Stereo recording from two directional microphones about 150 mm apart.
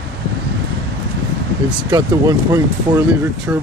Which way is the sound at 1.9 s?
25° right (ahead or behind).